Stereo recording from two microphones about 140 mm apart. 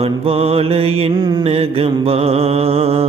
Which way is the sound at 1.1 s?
30° right (ahead or behind).